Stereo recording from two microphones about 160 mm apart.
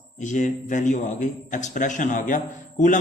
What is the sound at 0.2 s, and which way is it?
A man's voice, 50° left (ahead or behind).